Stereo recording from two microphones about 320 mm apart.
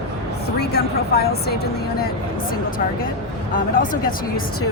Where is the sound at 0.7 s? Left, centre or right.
Left.